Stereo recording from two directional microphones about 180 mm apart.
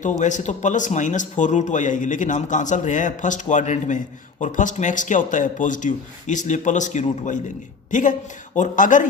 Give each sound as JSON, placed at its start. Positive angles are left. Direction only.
{"t": 0.0, "sound": "a woman's voice", "side_deg": 45}